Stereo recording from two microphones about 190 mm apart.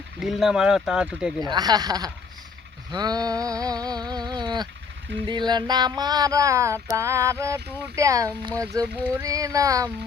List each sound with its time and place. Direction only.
0.2 s speech: centre (ahead or behind)
1.5 s a sound: 20° right (ahead or behind)
6.9 s child singing: 15° right (ahead or behind)